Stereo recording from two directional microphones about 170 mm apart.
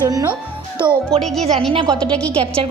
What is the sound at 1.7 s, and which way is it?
Speech, 25° right (ahead or behind).